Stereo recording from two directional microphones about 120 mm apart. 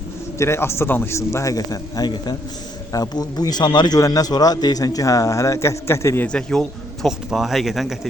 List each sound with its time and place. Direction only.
0.3 s a man's voice: 20° left (ahead or behind)
6.2 s speech: 5° left (ahead or behind)